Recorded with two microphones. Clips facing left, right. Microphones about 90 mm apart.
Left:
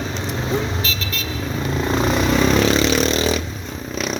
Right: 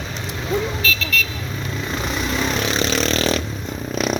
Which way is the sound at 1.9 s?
30° left (ahead or behind).